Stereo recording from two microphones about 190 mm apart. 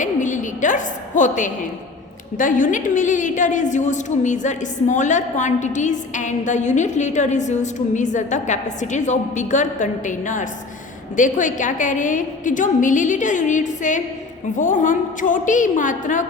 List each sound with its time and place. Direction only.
0.0 s a woman's voice: 40° left (ahead or behind)